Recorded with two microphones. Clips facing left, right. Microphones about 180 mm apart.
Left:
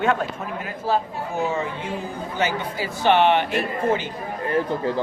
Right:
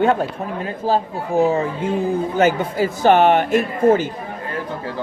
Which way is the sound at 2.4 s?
50° right (ahead or behind).